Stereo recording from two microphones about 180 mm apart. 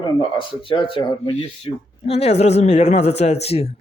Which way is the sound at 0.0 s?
30° left (ahead or behind).